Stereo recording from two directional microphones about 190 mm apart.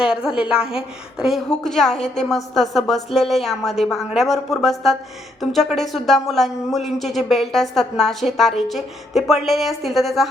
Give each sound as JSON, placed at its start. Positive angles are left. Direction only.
{"t": 0.0, "sound": "a woman's voice", "side_deg": -5}